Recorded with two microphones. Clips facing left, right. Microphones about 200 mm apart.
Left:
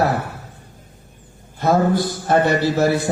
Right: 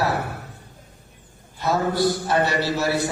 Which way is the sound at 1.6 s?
50° left (ahead or behind).